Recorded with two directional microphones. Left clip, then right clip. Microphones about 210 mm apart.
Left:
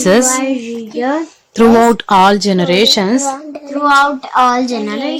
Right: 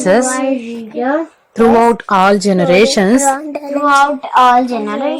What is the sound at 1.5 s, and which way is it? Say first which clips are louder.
Speech: left 1 dB; 25° left (ahead or behind).